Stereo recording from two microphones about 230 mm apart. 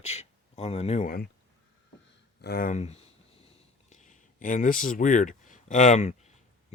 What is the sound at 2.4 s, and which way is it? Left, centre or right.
Speech, left.